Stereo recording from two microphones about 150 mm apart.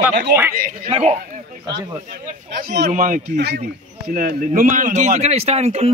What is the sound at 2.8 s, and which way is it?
Speech, 60° right (ahead or behind).